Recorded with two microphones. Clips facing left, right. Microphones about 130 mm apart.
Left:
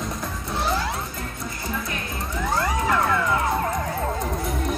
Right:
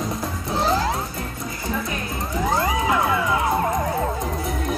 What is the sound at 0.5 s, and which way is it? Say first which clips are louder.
Music: right 4 dB; 35° right (ahead or behind).